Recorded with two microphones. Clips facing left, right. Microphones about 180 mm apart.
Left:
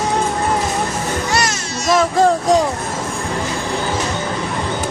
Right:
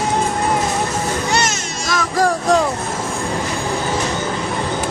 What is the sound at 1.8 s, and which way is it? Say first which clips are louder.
Music: left 4 dB; 25° left (ahead or behind).